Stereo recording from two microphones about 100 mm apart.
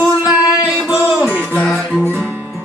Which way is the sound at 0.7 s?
10° right (ahead or behind).